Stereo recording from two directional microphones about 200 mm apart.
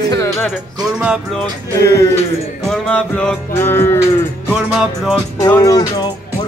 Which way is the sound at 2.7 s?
5° left (ahead or behind).